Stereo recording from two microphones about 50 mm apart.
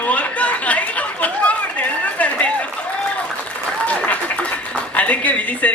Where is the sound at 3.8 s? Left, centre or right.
Left.